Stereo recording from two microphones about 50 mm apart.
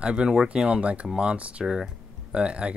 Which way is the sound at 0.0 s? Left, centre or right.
Centre.